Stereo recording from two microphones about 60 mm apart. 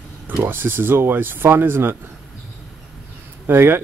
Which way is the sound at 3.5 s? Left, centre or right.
Right.